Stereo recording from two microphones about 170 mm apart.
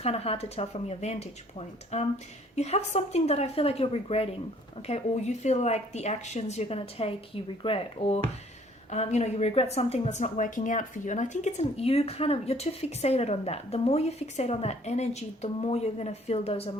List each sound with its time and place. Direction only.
0.0 s a woman's voice: 35° left (ahead or behind)